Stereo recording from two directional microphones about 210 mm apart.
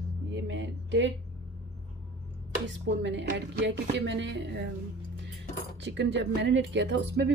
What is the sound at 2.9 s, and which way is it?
Speech, 60° right (ahead or behind).